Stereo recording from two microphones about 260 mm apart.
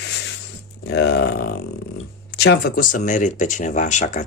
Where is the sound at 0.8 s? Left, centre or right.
Left.